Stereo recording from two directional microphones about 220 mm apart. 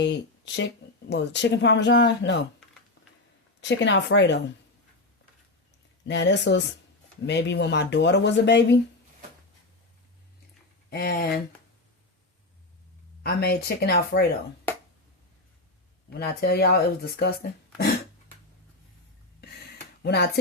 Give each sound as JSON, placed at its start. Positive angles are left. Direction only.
{"t": 0.0, "sound": "speech", "side_deg": 55}
{"t": 3.6, "sound": "speech", "side_deg": 55}
{"t": 6.1, "sound": "speech", "side_deg": 55}
{"t": 10.8, "sound": "speech", "side_deg": 45}
{"t": 13.2, "sound": "speech", "side_deg": 45}
{"t": 16.1, "sound": "speech", "side_deg": 45}
{"t": 20.0, "sound": "speech", "side_deg": 45}